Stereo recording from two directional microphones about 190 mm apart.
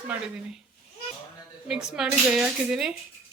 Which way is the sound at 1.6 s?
5° right (ahead or behind).